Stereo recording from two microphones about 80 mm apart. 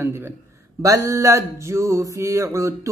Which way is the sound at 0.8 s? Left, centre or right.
Right.